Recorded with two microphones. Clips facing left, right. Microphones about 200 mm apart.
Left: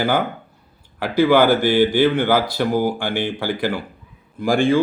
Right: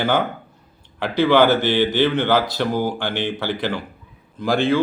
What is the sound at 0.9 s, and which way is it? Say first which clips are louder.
Speech: left 1 dB; 10° left (ahead or behind).